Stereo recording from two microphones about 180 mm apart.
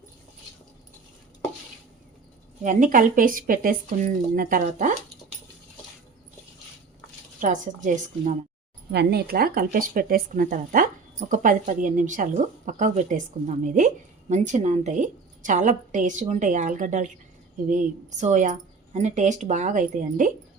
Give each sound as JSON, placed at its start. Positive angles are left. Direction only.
{"t": 2.6, "sound": "speech", "side_deg": -45}
{"t": 7.4, "sound": "speech", "side_deg": -45}
{"t": 8.9, "sound": "speech", "side_deg": -65}